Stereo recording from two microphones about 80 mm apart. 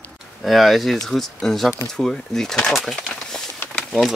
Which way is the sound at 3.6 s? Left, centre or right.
Centre.